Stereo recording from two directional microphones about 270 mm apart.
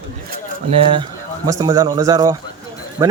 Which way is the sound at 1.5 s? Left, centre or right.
Centre.